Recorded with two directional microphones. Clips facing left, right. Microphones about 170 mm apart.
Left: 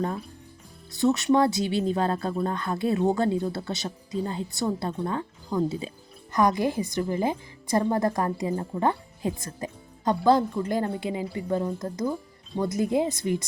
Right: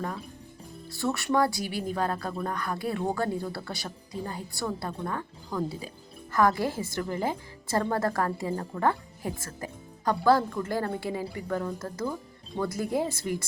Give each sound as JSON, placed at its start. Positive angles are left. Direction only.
{"t": 0.9, "sound": "a woman's voice", "side_deg": 20}